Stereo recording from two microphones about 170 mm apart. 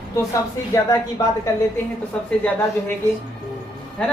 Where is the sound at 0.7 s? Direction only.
20° left (ahead or behind).